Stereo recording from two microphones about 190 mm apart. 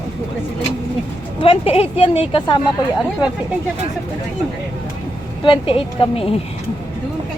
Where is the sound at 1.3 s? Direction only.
30° left (ahead or behind).